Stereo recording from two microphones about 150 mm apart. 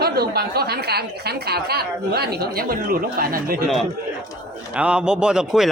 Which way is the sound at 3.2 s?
75° right (ahead or behind).